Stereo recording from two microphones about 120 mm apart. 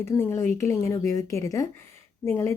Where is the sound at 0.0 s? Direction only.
20° left (ahead or behind).